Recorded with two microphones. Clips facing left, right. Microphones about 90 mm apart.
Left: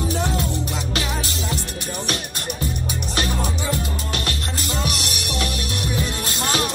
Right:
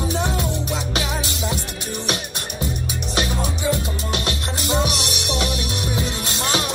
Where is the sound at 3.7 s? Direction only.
20° right (ahead or behind).